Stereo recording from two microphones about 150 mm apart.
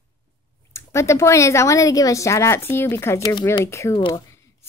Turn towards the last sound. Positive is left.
turn(degrees=20)  # may be behind; listen again after turning